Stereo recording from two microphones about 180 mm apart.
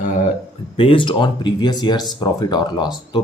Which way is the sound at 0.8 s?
30° left (ahead or behind).